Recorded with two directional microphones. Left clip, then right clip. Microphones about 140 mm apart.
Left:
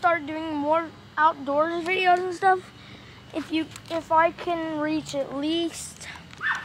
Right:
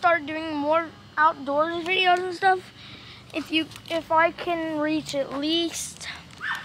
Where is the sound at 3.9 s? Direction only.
50° right (ahead or behind).